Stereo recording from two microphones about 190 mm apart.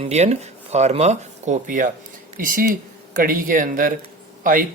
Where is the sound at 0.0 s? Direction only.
35° right (ahead or behind).